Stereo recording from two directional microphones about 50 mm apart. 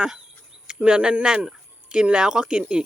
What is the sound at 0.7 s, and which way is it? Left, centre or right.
Speech, right.